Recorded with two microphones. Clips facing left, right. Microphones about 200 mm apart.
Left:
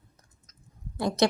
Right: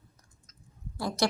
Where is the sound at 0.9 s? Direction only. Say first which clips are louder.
Left 5 dB; 20° left (ahead or behind).